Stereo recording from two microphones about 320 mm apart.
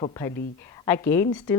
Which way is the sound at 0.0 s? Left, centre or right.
Centre.